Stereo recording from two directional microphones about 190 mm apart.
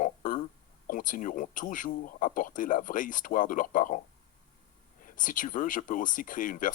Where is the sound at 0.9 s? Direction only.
45° left (ahead or behind).